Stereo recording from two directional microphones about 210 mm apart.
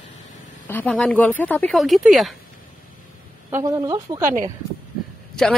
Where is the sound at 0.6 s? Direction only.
10° left (ahead or behind).